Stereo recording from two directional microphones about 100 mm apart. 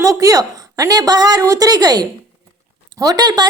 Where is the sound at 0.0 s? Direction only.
35° right (ahead or behind).